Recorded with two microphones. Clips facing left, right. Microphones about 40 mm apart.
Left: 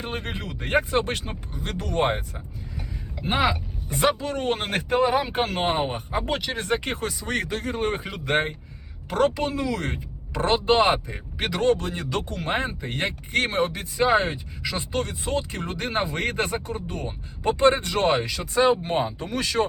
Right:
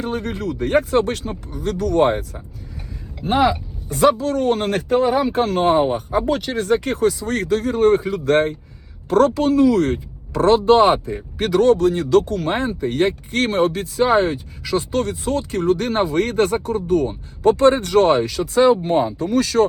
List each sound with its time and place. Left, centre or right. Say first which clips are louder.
0.0 s speech: right 8 dB; left
3.3 s speech: right 7 dB; left
6.2 s speech: right 7 dB; left